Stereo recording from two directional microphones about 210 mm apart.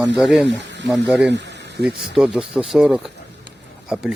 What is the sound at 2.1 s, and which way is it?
Speech, 5° right (ahead or behind).